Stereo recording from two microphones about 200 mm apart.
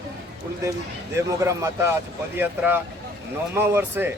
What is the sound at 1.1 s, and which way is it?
Speech, 15° right (ahead or behind).